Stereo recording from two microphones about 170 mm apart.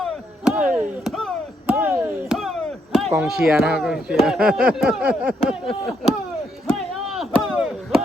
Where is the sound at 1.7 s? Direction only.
10° right (ahead or behind).